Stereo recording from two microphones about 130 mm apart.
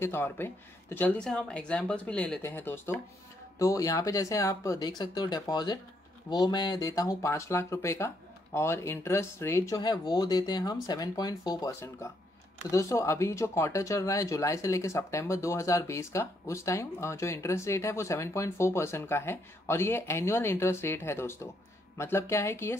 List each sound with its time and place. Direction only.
0.0 s speech: 20° left (ahead or behind)
12.7 s speech: 25° left (ahead or behind)